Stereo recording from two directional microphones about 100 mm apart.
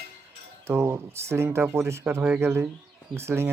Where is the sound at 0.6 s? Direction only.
25° right (ahead or behind).